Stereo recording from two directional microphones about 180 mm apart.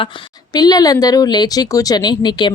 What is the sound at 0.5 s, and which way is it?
A woman's voice, 20° left (ahead or behind).